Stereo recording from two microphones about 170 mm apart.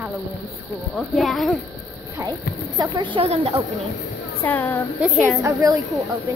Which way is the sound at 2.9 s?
30° right (ahead or behind).